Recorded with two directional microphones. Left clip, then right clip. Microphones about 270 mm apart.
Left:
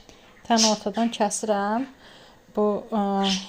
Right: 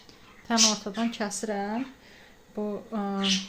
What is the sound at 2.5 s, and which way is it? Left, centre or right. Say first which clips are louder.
Speech: left 10 dB; centre.